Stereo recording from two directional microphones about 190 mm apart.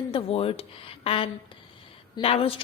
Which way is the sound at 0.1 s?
30° left (ahead or behind).